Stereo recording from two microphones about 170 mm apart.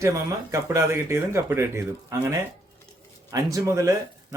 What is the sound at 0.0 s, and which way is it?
Speech, 20° right (ahead or behind).